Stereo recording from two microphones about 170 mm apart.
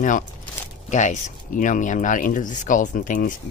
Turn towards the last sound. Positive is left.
turn(degrees=50)  # may be behind; listen again after turning